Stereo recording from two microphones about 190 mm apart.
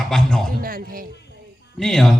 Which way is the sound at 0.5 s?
50° right (ahead or behind).